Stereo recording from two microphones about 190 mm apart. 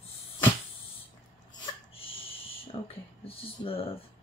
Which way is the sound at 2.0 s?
30° left (ahead or behind).